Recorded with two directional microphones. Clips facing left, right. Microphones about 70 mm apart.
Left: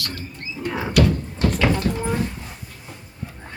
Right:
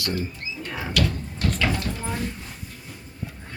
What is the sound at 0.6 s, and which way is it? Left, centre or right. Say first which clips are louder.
Door: left 7 dB; left.